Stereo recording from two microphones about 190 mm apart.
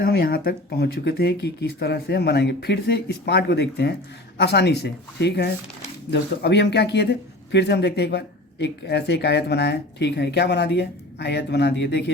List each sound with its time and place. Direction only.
0.0 s speech: 55° left (ahead or behind)